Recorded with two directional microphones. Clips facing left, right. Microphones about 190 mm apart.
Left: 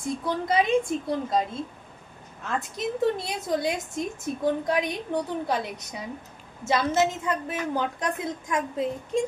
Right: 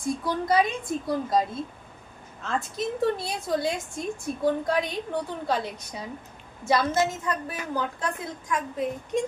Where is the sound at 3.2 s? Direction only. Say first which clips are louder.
Even; 20° left (ahead or behind).